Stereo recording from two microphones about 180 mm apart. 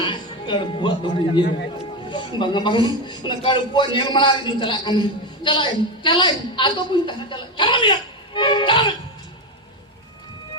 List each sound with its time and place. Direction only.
0.0 s a man's voice: 25° left (ahead or behind)